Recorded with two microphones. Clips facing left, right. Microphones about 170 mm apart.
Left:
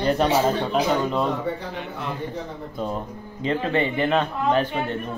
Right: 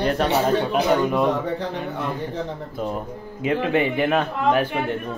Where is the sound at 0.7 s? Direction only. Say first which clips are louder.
Right 2 dB; 10° right (ahead or behind).